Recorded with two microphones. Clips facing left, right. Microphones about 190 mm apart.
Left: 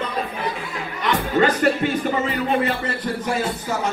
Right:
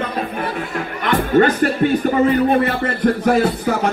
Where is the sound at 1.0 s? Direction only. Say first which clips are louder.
Right 5 dB; 55° right (ahead or behind).